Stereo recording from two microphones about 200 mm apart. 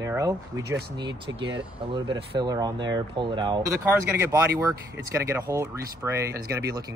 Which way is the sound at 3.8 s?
10° right (ahead or behind).